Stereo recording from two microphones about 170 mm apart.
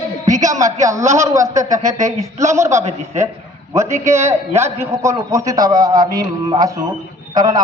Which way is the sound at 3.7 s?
15° right (ahead or behind).